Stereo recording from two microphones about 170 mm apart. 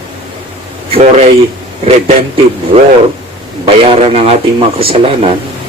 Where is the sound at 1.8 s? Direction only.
40° right (ahead or behind).